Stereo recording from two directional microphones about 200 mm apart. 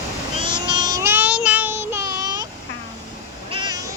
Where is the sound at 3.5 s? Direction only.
20° right (ahead or behind).